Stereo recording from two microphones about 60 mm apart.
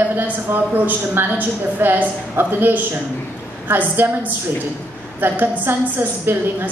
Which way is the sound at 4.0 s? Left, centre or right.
Right.